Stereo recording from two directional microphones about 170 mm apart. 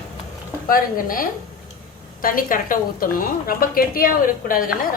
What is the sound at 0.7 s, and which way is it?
A woman's voice, 55° left (ahead or behind).